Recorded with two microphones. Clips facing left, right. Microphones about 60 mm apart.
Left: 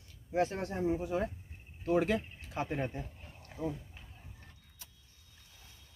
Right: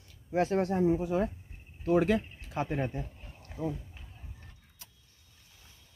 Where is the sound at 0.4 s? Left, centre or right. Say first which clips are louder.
Right 4 dB; right.